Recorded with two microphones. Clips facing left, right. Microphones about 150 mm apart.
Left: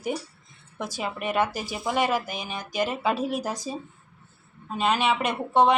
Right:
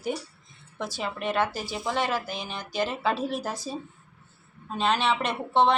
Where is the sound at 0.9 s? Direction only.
15° left (ahead or behind).